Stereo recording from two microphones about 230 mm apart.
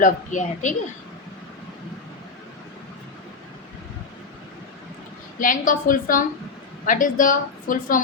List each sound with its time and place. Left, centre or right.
0.0 s a woman's voice: left
5.4 s a woman's voice: left